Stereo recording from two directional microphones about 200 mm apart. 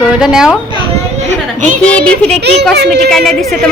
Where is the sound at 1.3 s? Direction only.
40° right (ahead or behind).